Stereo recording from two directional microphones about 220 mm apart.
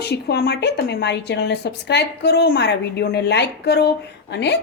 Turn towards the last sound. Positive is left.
turn(degrees=50)  # may be behind; listen again after turning